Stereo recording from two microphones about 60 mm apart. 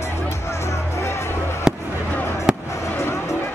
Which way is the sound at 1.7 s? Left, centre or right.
Centre.